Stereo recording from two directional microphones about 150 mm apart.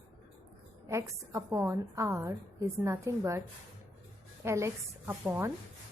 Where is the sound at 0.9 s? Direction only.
20° right (ahead or behind).